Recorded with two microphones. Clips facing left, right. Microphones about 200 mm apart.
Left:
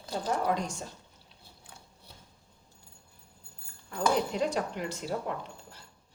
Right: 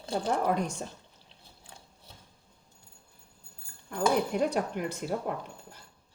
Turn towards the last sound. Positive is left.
turn(degrees=-50)  # may be behind; listen again after turning